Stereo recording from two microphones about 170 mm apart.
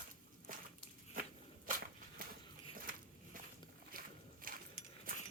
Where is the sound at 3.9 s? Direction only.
55° right (ahead or behind).